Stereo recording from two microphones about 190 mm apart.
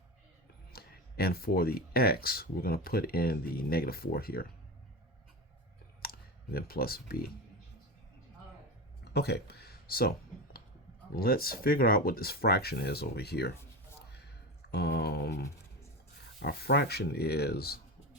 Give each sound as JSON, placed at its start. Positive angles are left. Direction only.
{"t": 0.7, "sound": "speech", "side_deg": 55}
{"t": 6.0, "sound": "clicking", "side_deg": 55}
{"t": 9.1, "sound": "speech", "side_deg": 60}
{"t": 11.1, "sound": "speech", "side_deg": 50}
{"t": 14.7, "sound": "a sound", "side_deg": 60}
{"t": 16.4, "sound": "speech", "side_deg": 55}